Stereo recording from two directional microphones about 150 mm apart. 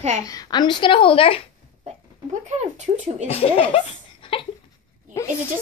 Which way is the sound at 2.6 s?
50° right (ahead or behind).